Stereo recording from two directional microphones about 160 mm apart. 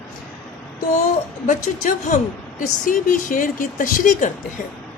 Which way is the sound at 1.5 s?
55° left (ahead or behind).